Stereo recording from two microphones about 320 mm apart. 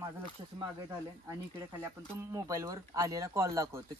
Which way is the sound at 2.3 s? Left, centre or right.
Centre.